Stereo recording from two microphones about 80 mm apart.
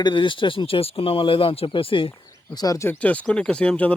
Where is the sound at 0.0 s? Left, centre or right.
Left.